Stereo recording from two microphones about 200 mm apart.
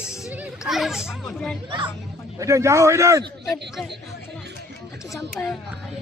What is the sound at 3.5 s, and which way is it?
Speech, centre (ahead or behind).